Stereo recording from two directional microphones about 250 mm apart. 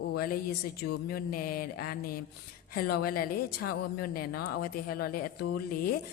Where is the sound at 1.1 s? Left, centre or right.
Left.